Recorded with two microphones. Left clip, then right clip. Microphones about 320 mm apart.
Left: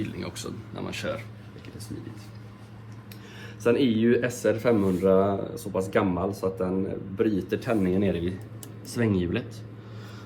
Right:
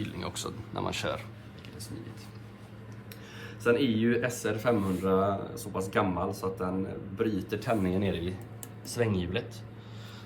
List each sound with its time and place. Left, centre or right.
0.0 s a sound: centre
0.8 s speech: centre
3.6 s speech: centre